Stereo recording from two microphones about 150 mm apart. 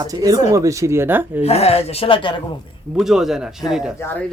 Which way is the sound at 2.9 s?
Centre (ahead or behind).